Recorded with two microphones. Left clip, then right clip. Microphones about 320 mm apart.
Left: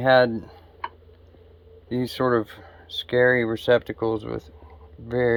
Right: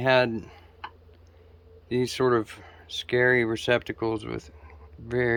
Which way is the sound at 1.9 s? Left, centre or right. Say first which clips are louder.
Left 1 dB; centre.